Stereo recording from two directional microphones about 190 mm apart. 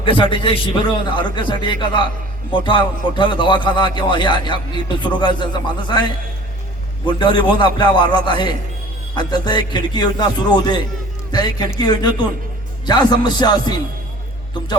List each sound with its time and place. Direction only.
0.0 s speech: 25° left (ahead or behind)
7.0 s speech: 25° left (ahead or behind)